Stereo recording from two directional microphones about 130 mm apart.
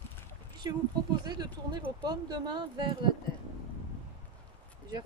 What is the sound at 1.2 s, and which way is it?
Speech, 35° right (ahead or behind).